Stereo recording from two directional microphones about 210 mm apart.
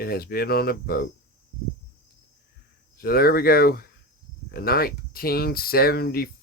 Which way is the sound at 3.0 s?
45° left (ahead or behind).